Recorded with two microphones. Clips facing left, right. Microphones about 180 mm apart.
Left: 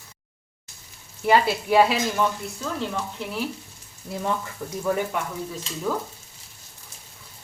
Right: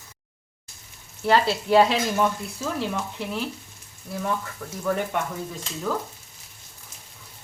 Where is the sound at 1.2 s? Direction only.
10° left (ahead or behind).